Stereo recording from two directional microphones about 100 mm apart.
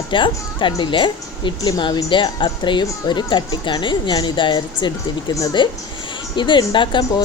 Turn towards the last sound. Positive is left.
turn(degrees=55)  # may be behind; listen again after turning